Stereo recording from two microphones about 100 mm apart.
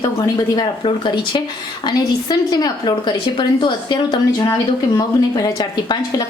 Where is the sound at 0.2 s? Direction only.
45° left (ahead or behind).